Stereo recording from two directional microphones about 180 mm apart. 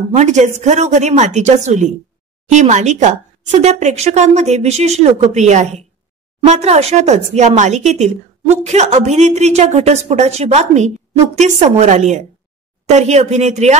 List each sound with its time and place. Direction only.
0.1 s speech: 40° right (ahead or behind)